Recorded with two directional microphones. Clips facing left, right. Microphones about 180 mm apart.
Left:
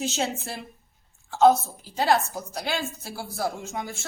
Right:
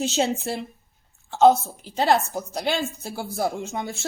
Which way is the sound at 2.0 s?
25° right (ahead or behind).